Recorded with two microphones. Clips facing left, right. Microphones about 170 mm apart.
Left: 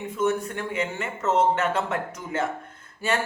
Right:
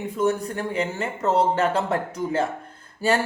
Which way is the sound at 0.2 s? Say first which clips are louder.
Right 2 dB; 35° right (ahead or behind).